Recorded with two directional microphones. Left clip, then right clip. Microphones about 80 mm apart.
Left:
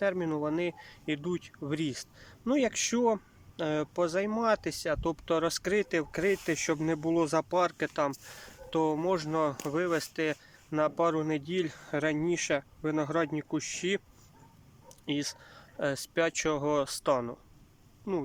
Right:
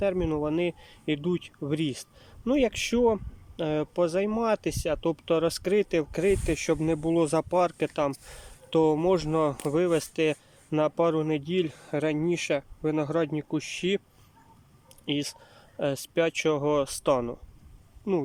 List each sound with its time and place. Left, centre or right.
0.0 s speech: right
8.4 s speech: right
15.0 s speech: right